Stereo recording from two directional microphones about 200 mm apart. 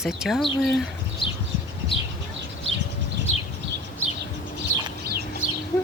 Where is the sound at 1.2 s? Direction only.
25° left (ahead or behind).